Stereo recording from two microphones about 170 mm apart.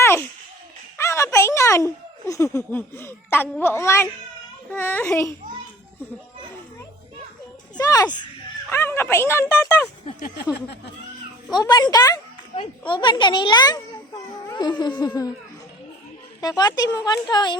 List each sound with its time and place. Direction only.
0.0 s music: 15° left (ahead or behind)
0.9 s baby laughter: 15° left (ahead or behind)
3.6 s speech: 15° left (ahead or behind)
7.8 s speech: 20° left (ahead or behind)
8.7 s speech: 15° left (ahead or behind)
10.2 s a sound: 60° left (ahead or behind)
11.5 s a child's voice: 25° left (ahead or behind)
16.4 s speech: 20° left (ahead or behind)